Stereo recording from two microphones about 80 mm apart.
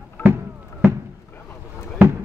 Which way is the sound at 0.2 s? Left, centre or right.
Left.